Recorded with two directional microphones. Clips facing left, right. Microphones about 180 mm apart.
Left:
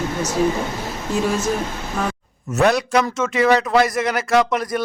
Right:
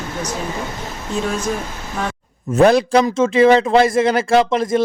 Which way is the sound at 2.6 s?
30° right (ahead or behind).